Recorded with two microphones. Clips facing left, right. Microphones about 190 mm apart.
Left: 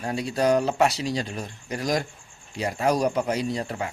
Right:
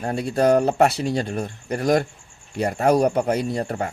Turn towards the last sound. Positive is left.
turn(degrees=-50)  # may be behind; listen again after turning